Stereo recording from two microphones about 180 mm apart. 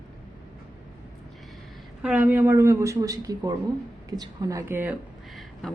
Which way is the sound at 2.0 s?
5° right (ahead or behind).